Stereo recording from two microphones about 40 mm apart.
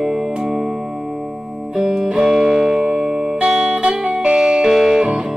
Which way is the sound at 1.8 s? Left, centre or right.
Centre.